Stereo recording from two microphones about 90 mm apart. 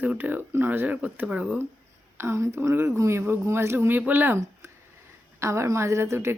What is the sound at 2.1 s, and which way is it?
Speech, 30° right (ahead or behind).